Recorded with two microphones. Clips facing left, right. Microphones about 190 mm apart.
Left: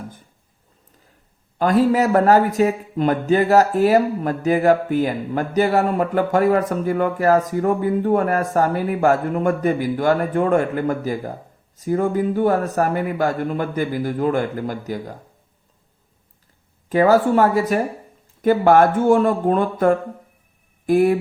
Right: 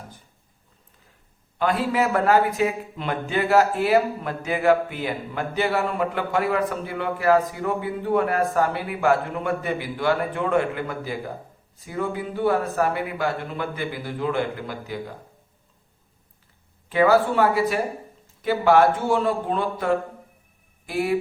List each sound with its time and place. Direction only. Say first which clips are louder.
1.5 s a man's voice: left 6 dB; 40° left (ahead or behind)
16.9 s a man's voice: left 4 dB; 40° left (ahead or behind)